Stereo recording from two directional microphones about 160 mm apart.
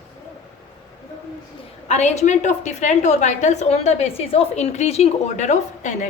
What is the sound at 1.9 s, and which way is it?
A woman's voice, 45° left (ahead or behind).